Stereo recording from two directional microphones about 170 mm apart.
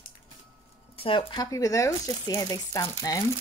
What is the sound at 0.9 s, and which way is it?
Speech, 30° left (ahead or behind).